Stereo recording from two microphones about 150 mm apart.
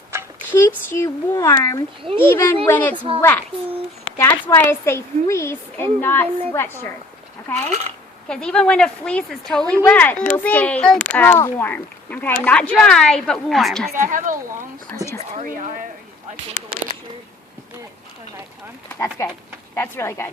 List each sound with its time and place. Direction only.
0.1 s a sound: 15° right (ahead or behind)
0.5 s a child's voice: 15° left (ahead or behind)
2.9 s a woman's voice: 35° right (ahead or behind)
3.2 s a child's voice: 15° left (ahead or behind)
4.4 s a child's voice: 15° left (ahead or behind)
8.3 s a child's voice: 5° left (ahead or behind)
13.9 s speech: 60° right (ahead or behind)
14.9 s a child's voice: 20° left (ahead or behind)
15.2 s speech: 50° right (ahead or behind)
19.2 s a child's voice: 20° left (ahead or behind)